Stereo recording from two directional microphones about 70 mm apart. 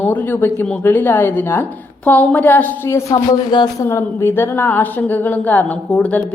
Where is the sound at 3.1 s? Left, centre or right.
Left.